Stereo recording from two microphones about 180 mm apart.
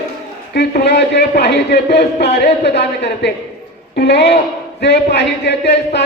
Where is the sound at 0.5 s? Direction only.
65° left (ahead or behind).